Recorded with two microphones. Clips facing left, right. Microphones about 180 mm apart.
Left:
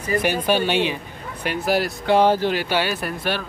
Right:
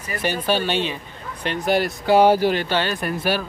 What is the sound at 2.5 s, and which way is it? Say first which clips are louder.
Speech: even; 10° left (ahead or behind).